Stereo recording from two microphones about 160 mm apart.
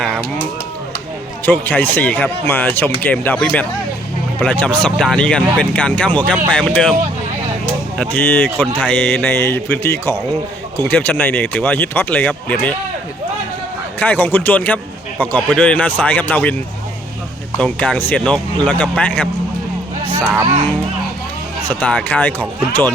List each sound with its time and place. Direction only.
1.5 s speech: 10° left (ahead or behind)
7.9 s speech: 10° left (ahead or behind)
14.0 s speech: 10° left (ahead or behind)
17.6 s speech: 5° left (ahead or behind)
20.1 s speech: 10° right (ahead or behind)
21.7 s speech: 10° left (ahead or behind)